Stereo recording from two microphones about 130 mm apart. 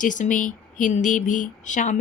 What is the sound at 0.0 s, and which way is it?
A woman's voice, 80° left.